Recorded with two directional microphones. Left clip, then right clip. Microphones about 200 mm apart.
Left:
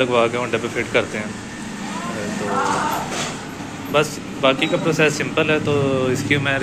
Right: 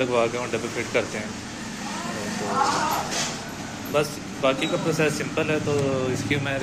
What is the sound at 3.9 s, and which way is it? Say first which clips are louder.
A man's voice: left 6 dB; centre (ahead or behind).